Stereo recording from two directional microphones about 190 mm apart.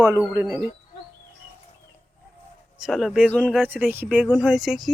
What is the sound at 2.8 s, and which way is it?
Speech, centre (ahead or behind).